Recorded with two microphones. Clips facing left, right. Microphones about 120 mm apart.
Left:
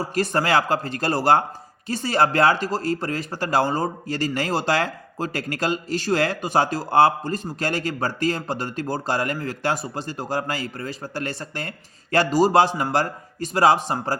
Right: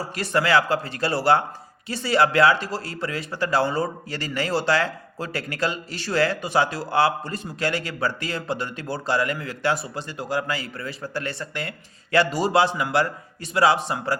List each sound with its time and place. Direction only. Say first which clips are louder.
0.1 s a man's voice: right 1 dB; 45° left (ahead or behind)